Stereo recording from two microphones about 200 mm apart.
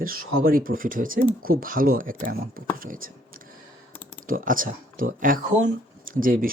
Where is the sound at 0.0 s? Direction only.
45° right (ahead or behind).